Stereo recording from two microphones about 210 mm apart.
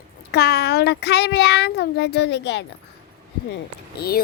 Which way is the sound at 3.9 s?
45° left (ahead or behind).